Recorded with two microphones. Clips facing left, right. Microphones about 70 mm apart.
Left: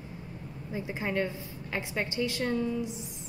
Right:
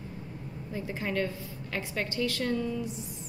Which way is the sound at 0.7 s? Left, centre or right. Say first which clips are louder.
Left 1 dB; centre.